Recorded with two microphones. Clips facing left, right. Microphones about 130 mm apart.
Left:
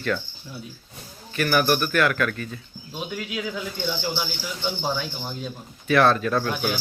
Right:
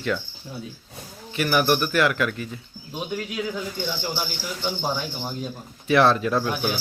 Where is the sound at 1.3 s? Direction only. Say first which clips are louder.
Even; 15° right (ahead or behind).